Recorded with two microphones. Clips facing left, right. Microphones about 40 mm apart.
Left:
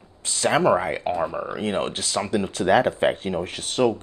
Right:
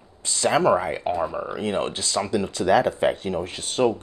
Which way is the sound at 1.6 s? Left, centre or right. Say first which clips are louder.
Even; left.